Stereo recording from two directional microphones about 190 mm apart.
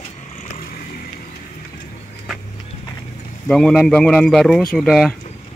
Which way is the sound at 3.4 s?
5° left (ahead or behind).